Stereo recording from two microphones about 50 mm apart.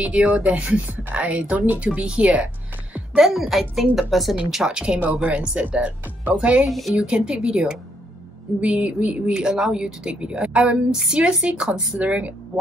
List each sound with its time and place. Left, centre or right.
0.0 s speech: right
3.2 s speech: centre
4.5 s speech: centre; by 6.3 s right
6.7 s speech: centre
7.0 s speech: centre
10.2 s speech: right